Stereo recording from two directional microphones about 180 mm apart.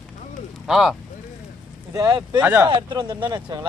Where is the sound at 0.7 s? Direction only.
Centre (ahead or behind).